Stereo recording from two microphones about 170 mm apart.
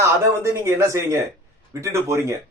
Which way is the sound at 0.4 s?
15° right (ahead or behind).